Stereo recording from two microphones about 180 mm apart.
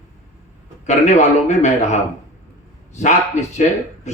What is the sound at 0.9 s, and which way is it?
Speech, 40° left (ahead or behind).